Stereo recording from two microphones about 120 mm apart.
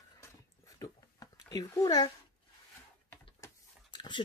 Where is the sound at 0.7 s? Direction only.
30° left (ahead or behind).